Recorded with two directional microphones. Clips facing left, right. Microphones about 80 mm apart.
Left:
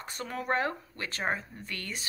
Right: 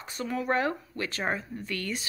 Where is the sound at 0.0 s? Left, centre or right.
Left.